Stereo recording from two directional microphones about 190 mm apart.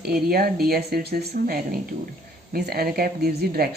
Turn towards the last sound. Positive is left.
turn(degrees=-55)  # may be behind; listen again after turning